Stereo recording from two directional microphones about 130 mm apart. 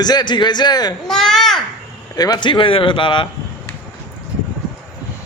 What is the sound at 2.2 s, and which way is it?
Speech, 35° left (ahead or behind).